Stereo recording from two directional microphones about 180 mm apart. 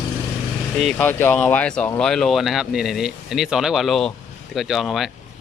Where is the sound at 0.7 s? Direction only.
5° left (ahead or behind).